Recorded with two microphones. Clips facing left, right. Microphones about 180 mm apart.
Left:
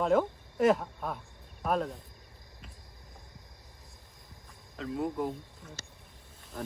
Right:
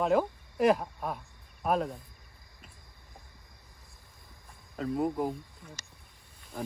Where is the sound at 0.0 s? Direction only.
5° right (ahead or behind).